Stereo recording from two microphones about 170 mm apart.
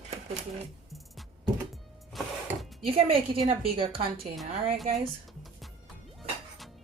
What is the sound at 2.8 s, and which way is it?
A woman's voice, 35° right (ahead or behind).